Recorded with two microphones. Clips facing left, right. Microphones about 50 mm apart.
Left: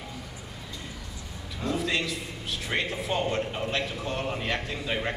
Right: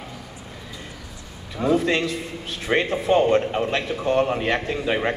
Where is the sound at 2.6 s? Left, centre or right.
Right.